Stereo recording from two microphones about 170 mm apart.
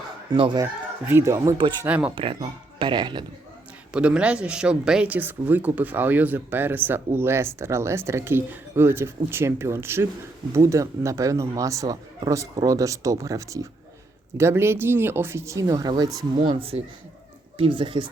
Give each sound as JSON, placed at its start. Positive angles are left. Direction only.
{"t": 0.3, "sound": "speech", "side_deg": -25}
{"t": 0.6, "sound": "speech", "side_deg": -15}
{"t": 2.1, "sound": "speech", "side_deg": -30}
{"t": 3.9, "sound": "speech", "side_deg": -5}